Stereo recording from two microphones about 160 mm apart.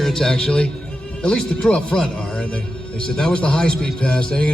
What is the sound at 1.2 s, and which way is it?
A man's voice, 5° left (ahead or behind).